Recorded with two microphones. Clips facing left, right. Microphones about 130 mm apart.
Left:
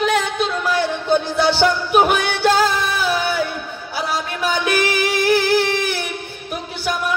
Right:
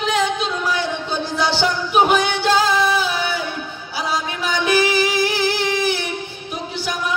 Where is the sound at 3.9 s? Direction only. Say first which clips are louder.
Even; 55° left (ahead or behind).